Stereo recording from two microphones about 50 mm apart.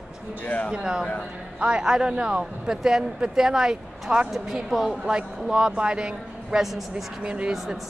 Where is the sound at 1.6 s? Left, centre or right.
Right; by 7.1 s centre.